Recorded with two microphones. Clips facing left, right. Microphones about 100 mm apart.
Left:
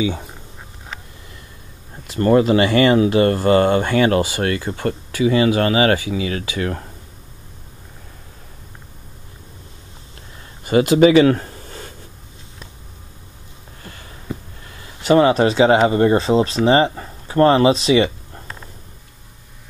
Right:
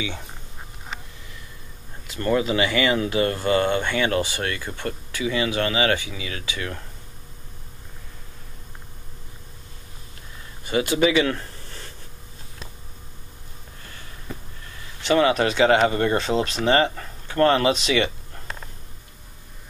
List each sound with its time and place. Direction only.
2.1 s speech: 45° left (ahead or behind)
10.6 s speech: 55° left (ahead or behind)
11.4 s a sound: 15° left (ahead or behind)
15.0 s speech: 30° left (ahead or behind)